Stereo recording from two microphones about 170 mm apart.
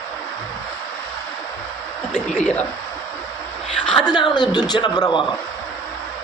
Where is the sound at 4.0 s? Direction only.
25° left (ahead or behind).